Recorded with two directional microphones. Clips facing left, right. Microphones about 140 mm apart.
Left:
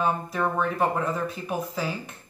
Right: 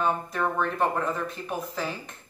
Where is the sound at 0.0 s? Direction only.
5° left (ahead or behind).